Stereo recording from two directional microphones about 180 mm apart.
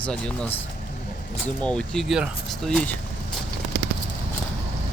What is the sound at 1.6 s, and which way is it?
Speech, 5° left (ahead or behind).